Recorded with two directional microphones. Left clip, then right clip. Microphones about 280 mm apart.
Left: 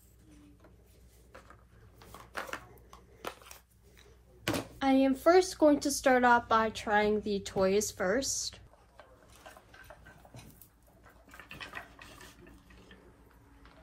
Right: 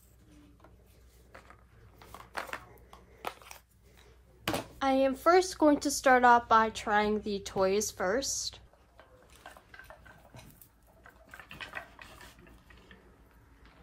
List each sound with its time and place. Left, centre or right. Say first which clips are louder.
1.3 s a sound: right 1 dB; centre
4.7 s speech: even; right
11.2 s pig: right 1 dB; centre